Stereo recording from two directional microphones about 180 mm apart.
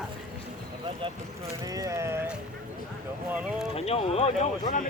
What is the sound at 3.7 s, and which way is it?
Speech, 35° left (ahead or behind).